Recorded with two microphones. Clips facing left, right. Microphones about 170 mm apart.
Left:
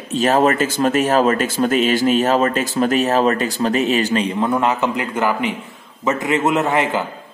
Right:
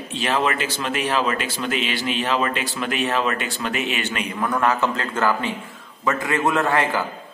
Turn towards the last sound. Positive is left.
turn(degrees=20)  # may be behind; listen again after turning